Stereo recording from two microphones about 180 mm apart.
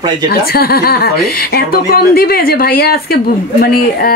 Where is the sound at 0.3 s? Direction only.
60° left (ahead or behind).